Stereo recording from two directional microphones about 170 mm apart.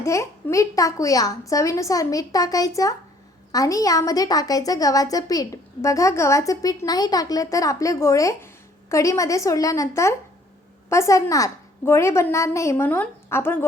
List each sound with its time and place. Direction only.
0.0 s a woman's voice: 15° left (ahead or behind)